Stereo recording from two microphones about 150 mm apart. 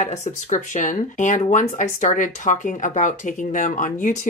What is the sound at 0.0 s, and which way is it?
Speech, 50° left (ahead or behind).